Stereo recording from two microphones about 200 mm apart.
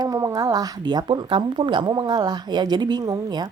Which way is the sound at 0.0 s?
15° right (ahead or behind).